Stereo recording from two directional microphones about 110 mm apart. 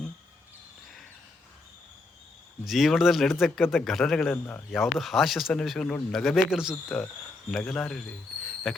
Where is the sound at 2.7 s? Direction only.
Centre (ahead or behind).